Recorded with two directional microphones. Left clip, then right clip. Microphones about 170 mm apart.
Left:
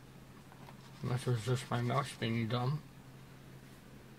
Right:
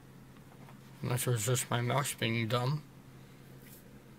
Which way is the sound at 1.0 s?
20° right (ahead or behind).